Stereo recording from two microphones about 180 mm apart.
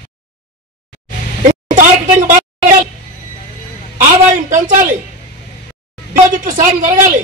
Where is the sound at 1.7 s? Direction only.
45° right (ahead or behind).